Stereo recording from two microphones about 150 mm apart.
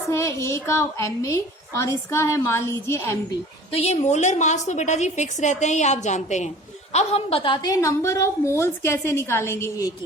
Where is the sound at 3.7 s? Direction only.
40° left (ahead or behind); by 9.9 s 20° left (ahead or behind).